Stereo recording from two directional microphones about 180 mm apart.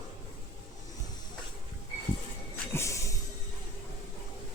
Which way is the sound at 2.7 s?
15° left (ahead or behind).